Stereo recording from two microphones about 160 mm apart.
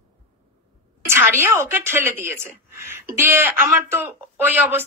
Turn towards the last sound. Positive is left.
turn(degrees=-10)  # may be behind; listen again after turning